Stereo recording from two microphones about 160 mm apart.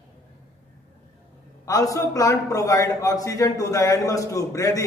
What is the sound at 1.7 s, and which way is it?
A man's voice, 20° left (ahead or behind).